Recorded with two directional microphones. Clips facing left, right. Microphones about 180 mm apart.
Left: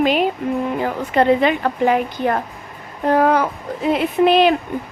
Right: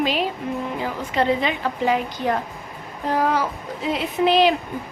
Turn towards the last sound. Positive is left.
turn(degrees=55)  # may be behind; listen again after turning